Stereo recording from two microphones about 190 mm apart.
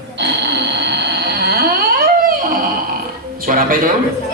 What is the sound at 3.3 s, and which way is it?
Music, 50° right (ahead or behind).